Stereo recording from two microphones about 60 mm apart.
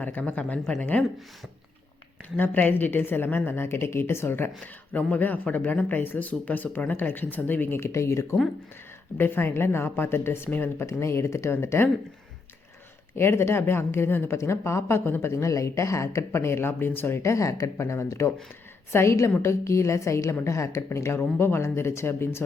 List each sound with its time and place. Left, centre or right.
0.0 s speech: left
2.3 s speech: left
4.6 s speech: left
9.1 s speech: left
10.8 s speech: left
13.1 s speech: left
15.3 s speech: left
17.2 s speech: left
18.9 s speech: left
21.2 s speech: left